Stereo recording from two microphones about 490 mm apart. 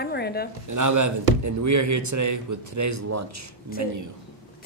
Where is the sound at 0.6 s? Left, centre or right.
Right.